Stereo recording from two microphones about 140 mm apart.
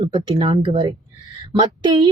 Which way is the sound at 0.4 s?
40° right (ahead or behind).